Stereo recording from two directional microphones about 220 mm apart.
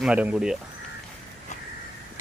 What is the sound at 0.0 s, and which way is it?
Speech, 5° right (ahead or behind).